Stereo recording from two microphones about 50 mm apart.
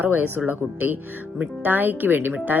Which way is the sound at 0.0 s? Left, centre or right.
Right.